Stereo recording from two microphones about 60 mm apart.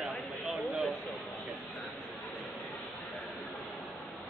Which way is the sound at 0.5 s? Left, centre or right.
Centre.